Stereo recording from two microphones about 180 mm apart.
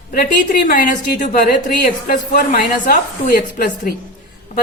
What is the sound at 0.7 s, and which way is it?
A woman's voice, 50° left (ahead or behind).